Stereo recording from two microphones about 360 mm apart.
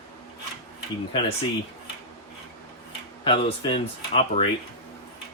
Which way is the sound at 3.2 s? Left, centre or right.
Centre.